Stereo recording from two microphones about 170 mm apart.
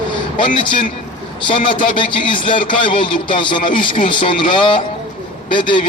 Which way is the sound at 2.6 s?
30° left (ahead or behind).